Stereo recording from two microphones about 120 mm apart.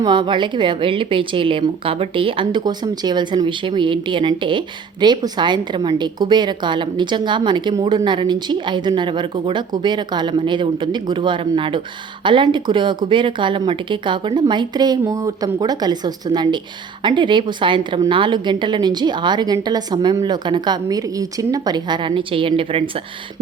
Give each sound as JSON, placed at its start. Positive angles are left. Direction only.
{"t": 0.0, "sound": "a woman's voice", "side_deg": -40}